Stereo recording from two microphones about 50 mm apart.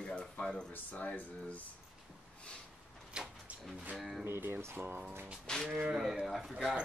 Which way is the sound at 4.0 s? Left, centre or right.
Centre.